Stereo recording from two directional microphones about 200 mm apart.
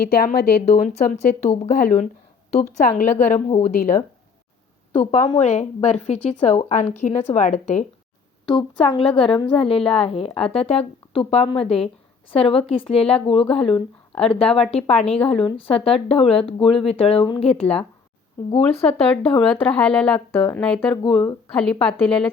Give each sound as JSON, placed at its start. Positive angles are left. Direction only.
{"t": 0.0, "sound": "a woman's voice", "side_deg": 50}
{"t": 4.9, "sound": "a woman's voice", "side_deg": 35}
{"t": 8.4, "sound": "speech", "side_deg": 20}
{"t": 18.9, "sound": "speech", "side_deg": 5}
{"t": 21.0, "sound": "speech", "side_deg": 20}
{"t": 21.5, "sound": "speech", "side_deg": 5}